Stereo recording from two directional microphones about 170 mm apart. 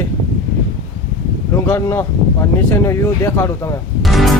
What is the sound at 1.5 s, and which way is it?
Speech, 15° left (ahead or behind).